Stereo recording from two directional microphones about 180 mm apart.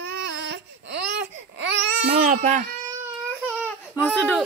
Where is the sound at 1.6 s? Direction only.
75° right (ahead or behind).